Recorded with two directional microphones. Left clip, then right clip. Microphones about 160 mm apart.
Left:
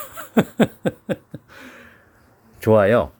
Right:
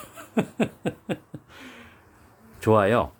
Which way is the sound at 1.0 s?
30° left (ahead or behind).